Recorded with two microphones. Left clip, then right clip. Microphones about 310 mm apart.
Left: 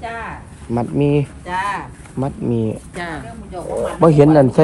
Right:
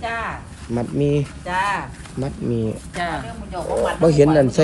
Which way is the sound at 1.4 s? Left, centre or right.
Centre.